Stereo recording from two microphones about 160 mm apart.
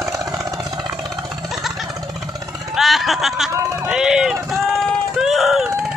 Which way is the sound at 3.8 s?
5° right (ahead or behind).